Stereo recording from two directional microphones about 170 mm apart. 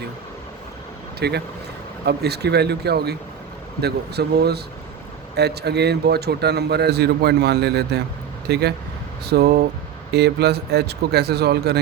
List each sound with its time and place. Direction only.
1.2 s a man's voice: 75° right (ahead or behind)